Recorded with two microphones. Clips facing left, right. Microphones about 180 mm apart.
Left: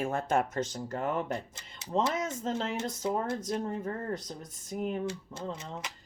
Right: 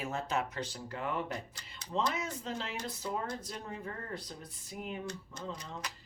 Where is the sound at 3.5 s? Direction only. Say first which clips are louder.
Left 9 dB; 45° left (ahead or behind).